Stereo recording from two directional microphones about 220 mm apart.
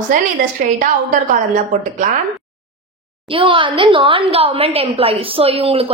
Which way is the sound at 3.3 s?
25° right (ahead or behind).